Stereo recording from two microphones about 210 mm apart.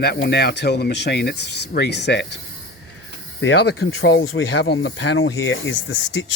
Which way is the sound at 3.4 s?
65° left (ahead or behind).